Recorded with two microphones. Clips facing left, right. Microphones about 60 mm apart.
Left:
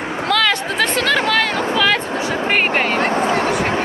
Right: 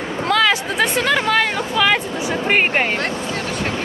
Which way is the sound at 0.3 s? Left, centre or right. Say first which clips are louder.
Right 1 dB; centre.